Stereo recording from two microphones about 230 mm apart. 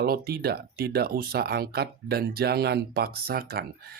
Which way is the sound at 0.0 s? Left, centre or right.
Right.